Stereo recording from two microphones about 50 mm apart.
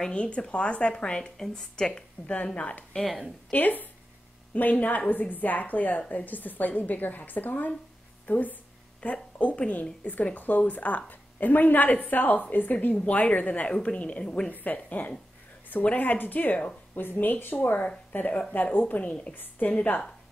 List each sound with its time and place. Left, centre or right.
0.1 s a woman's voice: left
3.4 s a woman's voice: left; by 14.5 s centre
14.6 s a woman's voice: left